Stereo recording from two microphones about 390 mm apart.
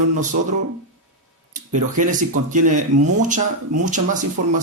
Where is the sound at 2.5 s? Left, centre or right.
Centre.